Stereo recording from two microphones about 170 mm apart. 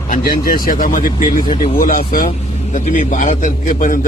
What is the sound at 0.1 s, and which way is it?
A man's voice, 60° left (ahead or behind).